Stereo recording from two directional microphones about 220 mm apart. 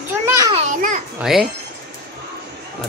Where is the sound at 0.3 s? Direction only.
15° right (ahead or behind).